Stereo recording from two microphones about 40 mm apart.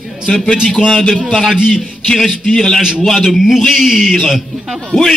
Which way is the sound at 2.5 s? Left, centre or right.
Centre.